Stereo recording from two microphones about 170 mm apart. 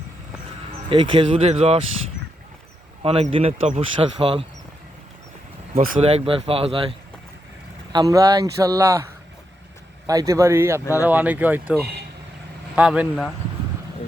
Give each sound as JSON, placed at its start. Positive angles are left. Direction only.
{"t": 0.9, "sound": "speech", "side_deg": -30}
{"t": 3.0, "sound": "speech", "side_deg": -35}
{"t": 5.7, "sound": "speech", "side_deg": -55}
{"t": 6.0, "sound": "speech", "side_deg": -35}
{"t": 7.9, "sound": "speech", "side_deg": -20}
{"t": 10.1, "sound": "speech", "side_deg": -20}